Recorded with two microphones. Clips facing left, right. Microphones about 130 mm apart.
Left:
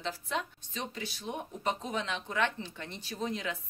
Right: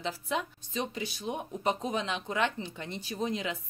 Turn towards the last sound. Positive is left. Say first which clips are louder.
# right 3 dB
turn(degrees=-20)  # may be behind; listen again after turning